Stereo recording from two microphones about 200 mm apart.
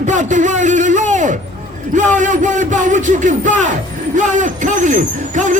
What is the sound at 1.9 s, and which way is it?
Speech, 40° right (ahead or behind).